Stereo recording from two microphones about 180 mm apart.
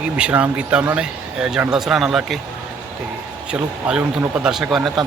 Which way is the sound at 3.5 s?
5° right (ahead or behind).